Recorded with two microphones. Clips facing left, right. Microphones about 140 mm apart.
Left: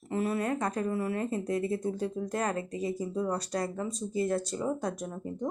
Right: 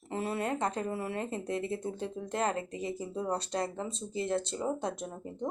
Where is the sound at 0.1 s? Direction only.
25° right (ahead or behind).